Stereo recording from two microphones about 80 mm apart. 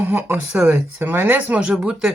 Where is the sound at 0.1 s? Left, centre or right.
Right.